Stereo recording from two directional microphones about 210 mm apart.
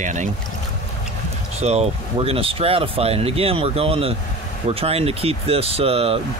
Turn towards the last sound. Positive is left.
turn(degrees=-25)  # may be behind; listen again after turning